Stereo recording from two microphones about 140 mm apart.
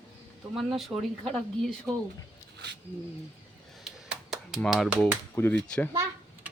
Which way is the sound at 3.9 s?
5° right (ahead or behind).